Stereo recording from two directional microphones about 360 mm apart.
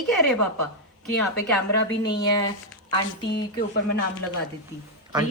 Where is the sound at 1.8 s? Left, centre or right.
Left.